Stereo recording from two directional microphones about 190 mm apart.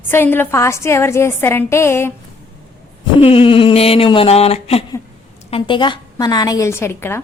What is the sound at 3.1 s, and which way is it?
A woman's voice, 30° left (ahead or behind).